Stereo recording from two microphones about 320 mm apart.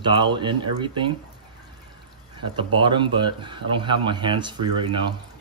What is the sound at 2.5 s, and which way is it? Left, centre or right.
Speech, centre.